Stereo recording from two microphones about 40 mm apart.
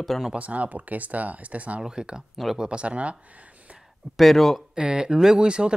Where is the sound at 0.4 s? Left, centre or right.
Right.